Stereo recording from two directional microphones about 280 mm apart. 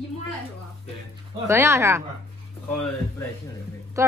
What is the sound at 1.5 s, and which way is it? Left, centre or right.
Speech, centre.